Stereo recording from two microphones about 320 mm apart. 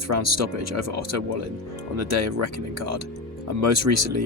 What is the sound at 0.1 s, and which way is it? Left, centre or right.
Speech, right.